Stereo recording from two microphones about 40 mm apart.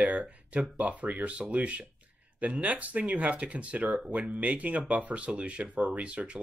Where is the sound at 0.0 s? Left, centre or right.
Right.